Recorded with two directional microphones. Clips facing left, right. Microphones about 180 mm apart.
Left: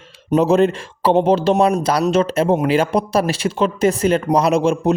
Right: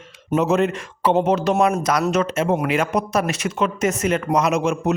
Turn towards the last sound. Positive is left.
turn(degrees=30)  # may be behind; listen again after turning